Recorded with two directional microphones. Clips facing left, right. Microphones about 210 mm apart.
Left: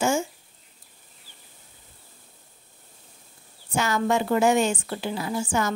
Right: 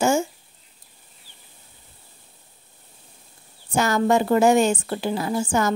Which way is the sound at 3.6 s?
40° right (ahead or behind).